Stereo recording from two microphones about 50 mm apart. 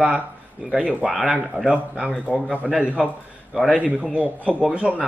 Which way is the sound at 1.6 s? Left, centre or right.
Left.